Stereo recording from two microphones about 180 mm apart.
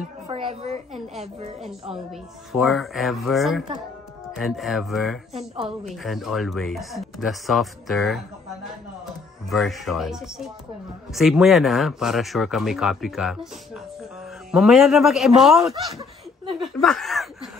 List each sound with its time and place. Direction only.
0.3 s a woman's voice: 30° right (ahead or behind)
2.5 s speech: centre (ahead or behind)
9.5 s speech: centre (ahead or behind)
14.5 s speech: centre (ahead or behind)
15.7 s laughter: 30° right (ahead or behind)
16.6 s speech: centre (ahead or behind)